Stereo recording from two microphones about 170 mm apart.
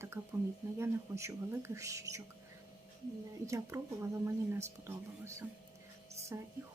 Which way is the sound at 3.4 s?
15° right (ahead or behind).